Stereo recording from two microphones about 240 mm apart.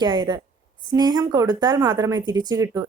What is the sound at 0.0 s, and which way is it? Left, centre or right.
Speech, centre.